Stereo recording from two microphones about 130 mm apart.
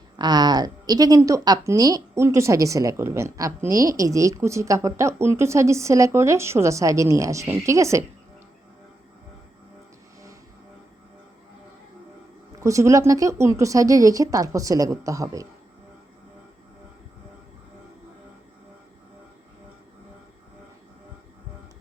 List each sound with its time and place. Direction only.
0.2 s a woman's voice: 30° right (ahead or behind)
12.5 s a woman's voice: 25° right (ahead or behind)